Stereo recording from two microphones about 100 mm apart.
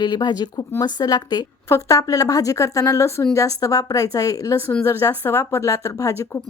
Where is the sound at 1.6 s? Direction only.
30° left (ahead or behind).